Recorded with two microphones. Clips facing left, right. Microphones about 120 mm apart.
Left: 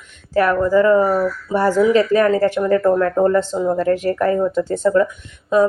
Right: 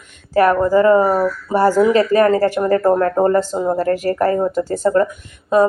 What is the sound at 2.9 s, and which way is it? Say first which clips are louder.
Speech: right 1 dB; 50° right (ahead or behind).